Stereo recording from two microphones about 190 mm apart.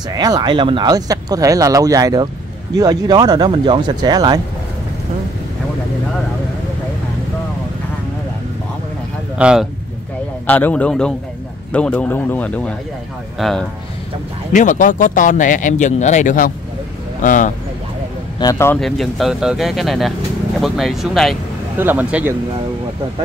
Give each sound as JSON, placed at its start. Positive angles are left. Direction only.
{"t": 0.1, "sound": "speech", "side_deg": -20}
{"t": 9.4, "sound": "speech", "side_deg": -5}
{"t": 10.4, "sound": "speech", "side_deg": 10}
{"t": 14.5, "sound": "speech", "side_deg": 40}
{"t": 18.4, "sound": "speech", "side_deg": 15}
{"t": 18.8, "sound": "speech", "side_deg": 0}
{"t": 21.7, "sound": "speech", "side_deg": -10}